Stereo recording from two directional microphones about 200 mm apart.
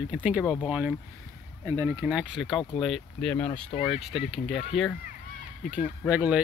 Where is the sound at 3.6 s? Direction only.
30° left (ahead or behind).